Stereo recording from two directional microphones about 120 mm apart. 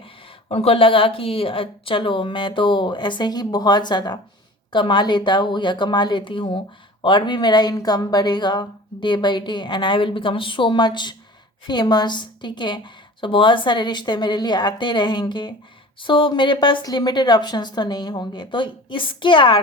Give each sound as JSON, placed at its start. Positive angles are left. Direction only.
{"t": 0.4, "sound": "a woman's voice", "side_deg": 50}